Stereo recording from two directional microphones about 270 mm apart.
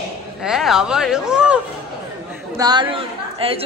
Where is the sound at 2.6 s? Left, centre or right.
Centre.